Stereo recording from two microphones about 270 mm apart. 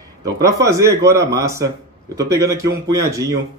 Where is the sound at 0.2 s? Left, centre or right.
Centre.